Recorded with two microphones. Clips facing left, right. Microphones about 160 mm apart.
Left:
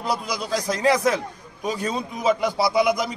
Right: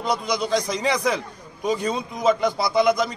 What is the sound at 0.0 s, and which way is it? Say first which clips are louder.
A man's voice: right 3 dB; 5° left (ahead or behind).